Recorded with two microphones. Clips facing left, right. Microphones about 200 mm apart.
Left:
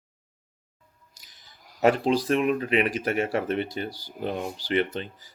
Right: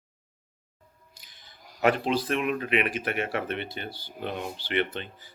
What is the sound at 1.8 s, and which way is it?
Speech, 40° left (ahead or behind).